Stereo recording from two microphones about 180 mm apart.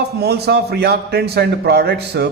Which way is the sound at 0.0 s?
65° right (ahead or behind).